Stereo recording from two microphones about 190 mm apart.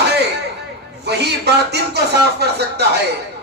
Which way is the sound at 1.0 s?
60° right (ahead or behind).